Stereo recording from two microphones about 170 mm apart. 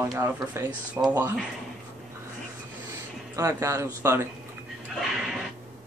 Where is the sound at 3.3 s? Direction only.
20° right (ahead or behind).